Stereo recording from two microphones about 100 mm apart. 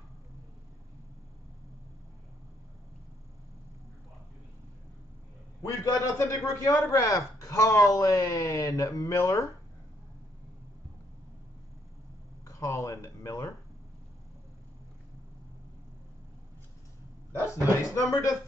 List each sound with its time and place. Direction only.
5.6 s a man's voice: 30° left (ahead or behind)
12.4 s speech: 30° left (ahead or behind)
17.5 s speech: 35° left (ahead or behind)